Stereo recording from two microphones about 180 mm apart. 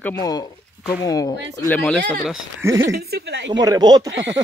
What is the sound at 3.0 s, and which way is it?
Speech, 65° right (ahead or behind).